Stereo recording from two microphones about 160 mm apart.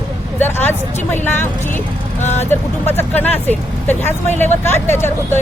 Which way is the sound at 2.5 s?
15° left (ahead or behind).